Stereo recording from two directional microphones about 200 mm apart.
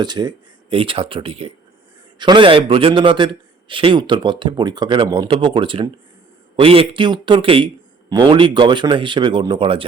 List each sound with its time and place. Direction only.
0.0 s a man's voice: 20° right (ahead or behind)